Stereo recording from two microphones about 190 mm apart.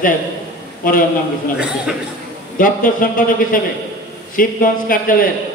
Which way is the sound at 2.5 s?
45° left (ahead or behind).